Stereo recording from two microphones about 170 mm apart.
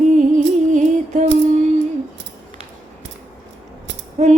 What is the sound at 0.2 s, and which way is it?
Music, 45° right (ahead or behind).